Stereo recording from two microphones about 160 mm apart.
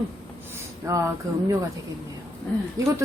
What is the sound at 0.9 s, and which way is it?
Speech, 20° right (ahead or behind).